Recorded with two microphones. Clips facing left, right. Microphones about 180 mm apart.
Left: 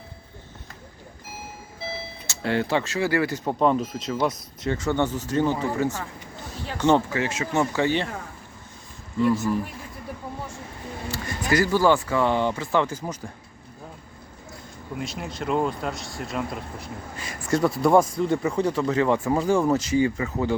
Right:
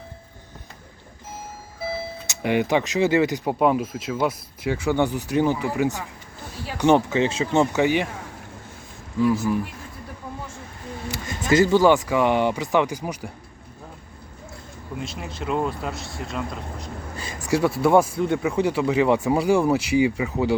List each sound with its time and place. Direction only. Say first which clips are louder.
2.2 s speech: right 2 dB; 15° right (ahead or behind)
9.2 s speech: right 1 dB; 10° right (ahead or behind)
11.1 s speech: right 3 dB; 20° right (ahead or behind)
15.0 s speech: left 1 dB; centre (ahead or behind)
17.5 s speech: right 1 dB; 5° right (ahead or behind)